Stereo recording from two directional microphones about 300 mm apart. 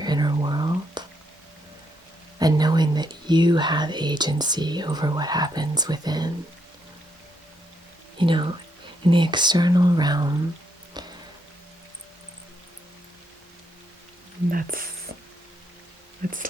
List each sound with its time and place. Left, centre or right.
0.0 s whispering: centre
2.4 s speech: centre
8.2 s speech: centre
11.0 s music: centre
14.5 s speech: right
16.2 s speech: right